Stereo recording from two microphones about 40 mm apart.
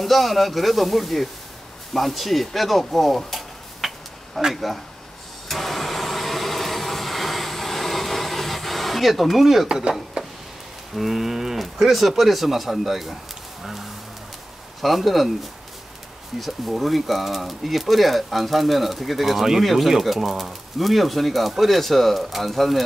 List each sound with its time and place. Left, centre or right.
0.0 s speech: centre
5.5 s vehicle: centre
9.7 s speech: centre
11.0 s speech: centre
14.8 s speech: centre
16.3 s speech: centre